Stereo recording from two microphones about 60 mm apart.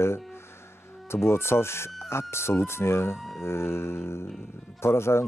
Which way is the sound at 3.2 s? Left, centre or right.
Centre.